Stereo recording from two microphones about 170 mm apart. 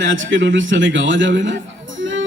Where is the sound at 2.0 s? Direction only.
90° right.